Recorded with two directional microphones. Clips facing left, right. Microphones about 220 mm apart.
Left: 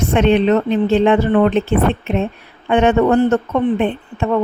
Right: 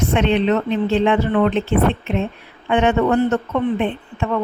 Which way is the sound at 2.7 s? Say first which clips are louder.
Left 3 dB; 40° left (ahead or behind).